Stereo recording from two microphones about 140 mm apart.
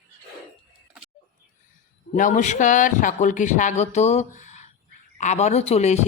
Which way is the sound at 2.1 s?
65° left (ahead or behind).